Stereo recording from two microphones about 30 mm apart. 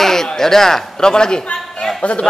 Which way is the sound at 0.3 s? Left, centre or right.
Centre.